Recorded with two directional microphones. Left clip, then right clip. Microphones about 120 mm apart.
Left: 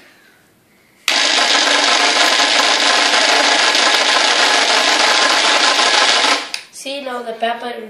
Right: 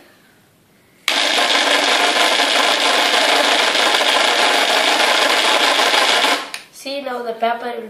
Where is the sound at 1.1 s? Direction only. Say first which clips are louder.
Left 2 dB; 15° right (ahead or behind).